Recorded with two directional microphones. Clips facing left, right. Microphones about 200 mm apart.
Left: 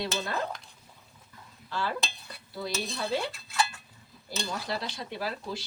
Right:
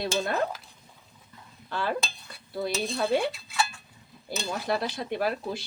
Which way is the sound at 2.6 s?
55° right (ahead or behind).